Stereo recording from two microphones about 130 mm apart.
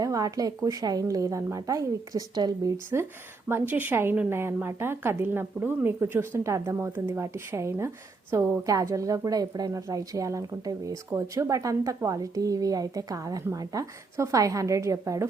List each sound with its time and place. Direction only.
0.0 s a woman's voice: 25° right (ahead or behind)
2.7 s a woman's voice: 20° right (ahead or behind)